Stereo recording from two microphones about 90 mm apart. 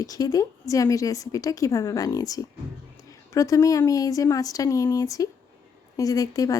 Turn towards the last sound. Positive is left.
turn(degrees=40)  # may be behind; listen again after turning